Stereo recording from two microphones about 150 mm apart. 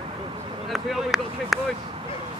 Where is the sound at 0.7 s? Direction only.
Centre (ahead or behind).